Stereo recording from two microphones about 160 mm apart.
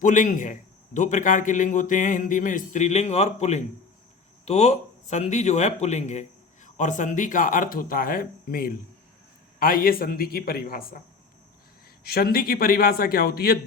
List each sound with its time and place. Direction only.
0.0 s a man's voice: 55° left (ahead or behind)
12.0 s a man's voice: 70° left (ahead or behind)